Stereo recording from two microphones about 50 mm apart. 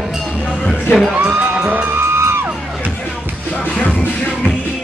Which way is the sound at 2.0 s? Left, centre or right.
Right.